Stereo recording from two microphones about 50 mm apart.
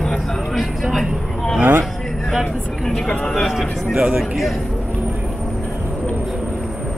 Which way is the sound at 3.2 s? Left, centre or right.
Centre.